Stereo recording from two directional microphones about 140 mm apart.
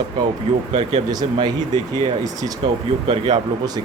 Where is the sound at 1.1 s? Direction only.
30° right (ahead or behind).